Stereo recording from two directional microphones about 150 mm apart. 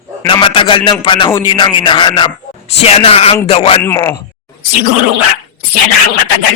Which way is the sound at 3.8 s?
15° left (ahead or behind).